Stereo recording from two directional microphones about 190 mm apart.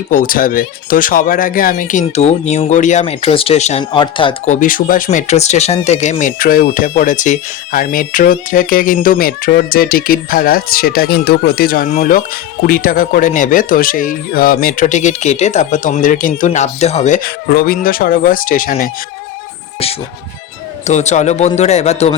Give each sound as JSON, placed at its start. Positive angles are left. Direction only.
{"t": 0.1, "sound": "speech", "side_deg": 45}
{"t": 4.4, "sound": "speech", "side_deg": 40}
{"t": 17.2, "sound": "speech", "side_deg": 50}
{"t": 20.8, "sound": "speech", "side_deg": 35}